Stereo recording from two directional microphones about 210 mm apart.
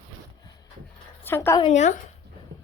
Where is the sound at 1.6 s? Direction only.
35° left (ahead or behind).